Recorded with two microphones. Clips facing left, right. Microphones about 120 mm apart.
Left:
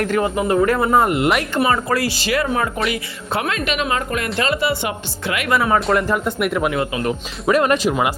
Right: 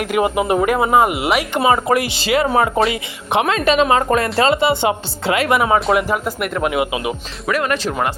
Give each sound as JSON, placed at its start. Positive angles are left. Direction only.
{"t": 0.0, "sound": "speech", "side_deg": -10}
{"t": 1.5, "sound": "speech", "side_deg": -20}
{"t": 5.5, "sound": "speech", "side_deg": -15}
{"t": 5.8, "sound": "speech", "side_deg": -5}
{"t": 6.7, "sound": "speech", "side_deg": -15}
{"t": 7.4, "sound": "speech", "side_deg": 25}
{"t": 7.8, "sound": "speech", "side_deg": 10}